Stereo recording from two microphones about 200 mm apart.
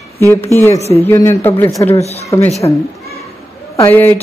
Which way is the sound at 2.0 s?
35° left (ahead or behind).